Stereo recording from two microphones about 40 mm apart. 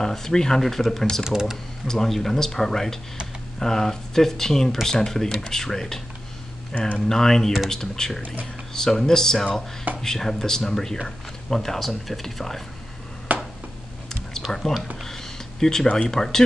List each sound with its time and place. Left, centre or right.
0.0 s speech: centre
1.2 s speech: centre
1.9 s speech: centre
6.7 s speech: left
7.1 s speech: centre
13.3 s a sound: right
14.4 s speech: centre
15.0 s a sound: centre
16.1 s speech: centre